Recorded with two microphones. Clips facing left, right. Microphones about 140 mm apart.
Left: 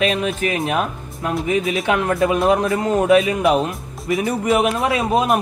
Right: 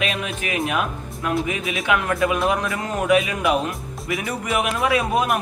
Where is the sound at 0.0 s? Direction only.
35° left (ahead or behind).